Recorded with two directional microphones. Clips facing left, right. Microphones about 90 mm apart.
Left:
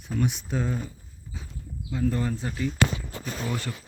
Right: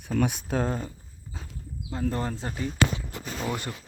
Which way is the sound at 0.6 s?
45° right (ahead or behind).